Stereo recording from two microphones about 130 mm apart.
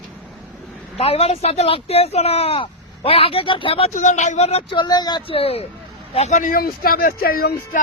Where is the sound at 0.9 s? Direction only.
50° left (ahead or behind).